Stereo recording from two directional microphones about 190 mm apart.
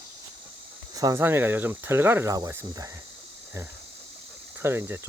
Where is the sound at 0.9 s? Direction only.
15° right (ahead or behind).